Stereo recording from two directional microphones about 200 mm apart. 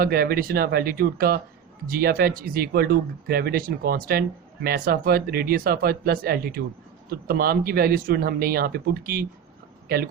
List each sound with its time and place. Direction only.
0.0 s speech: 50° right (ahead or behind)